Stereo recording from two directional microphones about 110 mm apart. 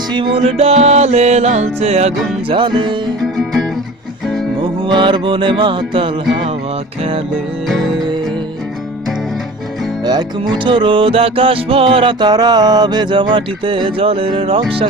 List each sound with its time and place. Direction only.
0.1 s music: 45° right (ahead or behind)
0.4 s music: 70° right (ahead or behind)
2.5 s music: 50° right (ahead or behind)
4.9 s music: 45° right (ahead or behind)
7.7 s music: centre (ahead or behind)
10.1 s music: 45° right (ahead or behind)